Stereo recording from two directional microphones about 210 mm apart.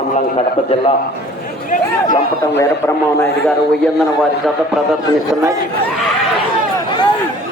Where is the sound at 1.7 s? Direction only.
35° left (ahead or behind).